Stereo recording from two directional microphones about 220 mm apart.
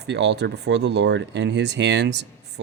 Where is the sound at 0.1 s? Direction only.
50° right (ahead or behind).